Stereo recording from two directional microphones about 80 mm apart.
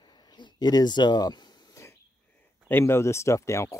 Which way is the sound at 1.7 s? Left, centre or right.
Left.